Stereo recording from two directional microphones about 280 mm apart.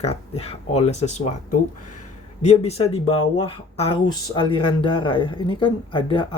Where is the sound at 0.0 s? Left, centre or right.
Left.